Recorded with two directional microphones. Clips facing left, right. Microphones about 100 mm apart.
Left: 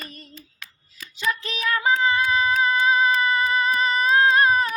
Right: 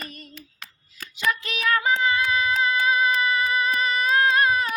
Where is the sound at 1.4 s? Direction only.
30° left (ahead or behind).